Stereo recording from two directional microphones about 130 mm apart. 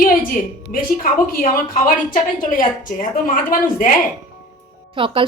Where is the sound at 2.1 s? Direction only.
90° left.